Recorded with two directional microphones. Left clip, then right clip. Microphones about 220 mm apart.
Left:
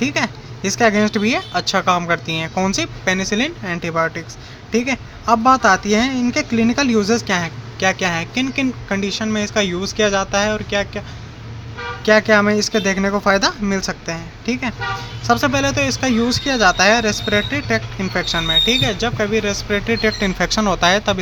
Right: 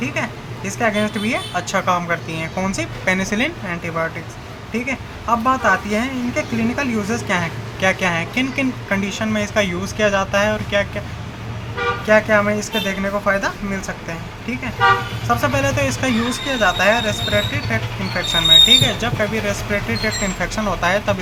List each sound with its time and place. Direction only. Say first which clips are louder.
0.0 s speech: left 3 dB; 45° left (ahead or behind)
5.3 s speech: left 3 dB; 45° left (ahead or behind)
12.0 s speech: left 2 dB; 50° left (ahead or behind)
15.3 s speech: left 2 dB; 45° left (ahead or behind)